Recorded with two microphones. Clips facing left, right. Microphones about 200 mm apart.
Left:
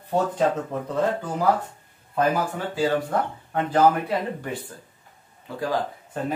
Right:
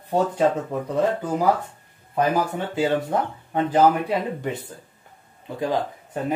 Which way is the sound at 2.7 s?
20° right (ahead or behind).